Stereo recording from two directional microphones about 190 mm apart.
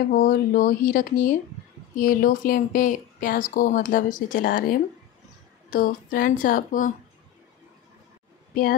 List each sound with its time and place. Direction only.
0.1 s speech: 45° left (ahead or behind)